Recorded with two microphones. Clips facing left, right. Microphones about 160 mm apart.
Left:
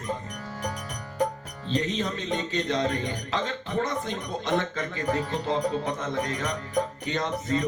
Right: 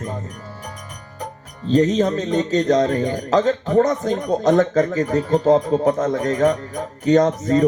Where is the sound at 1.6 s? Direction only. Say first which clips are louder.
Right 12 dB; 40° right (ahead or behind).